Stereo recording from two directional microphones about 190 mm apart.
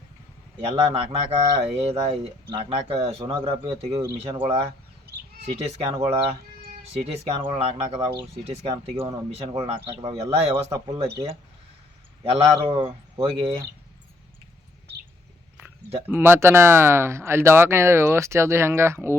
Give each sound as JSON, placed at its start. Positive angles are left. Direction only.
{"t": 0.6, "sound": "speech", "side_deg": -30}
{"t": 9.3, "sound": "speech", "side_deg": -30}
{"t": 12.2, "sound": "speech", "side_deg": -30}
{"t": 16.0, "sound": "speech", "side_deg": -10}